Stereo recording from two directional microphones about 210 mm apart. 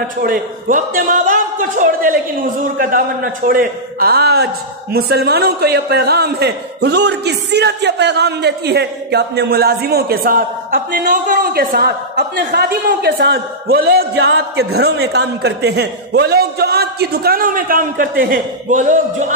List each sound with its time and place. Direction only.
0.2 s a man's voice: 40° right (ahead or behind)
3.4 s a man's voice: 45° right (ahead or behind)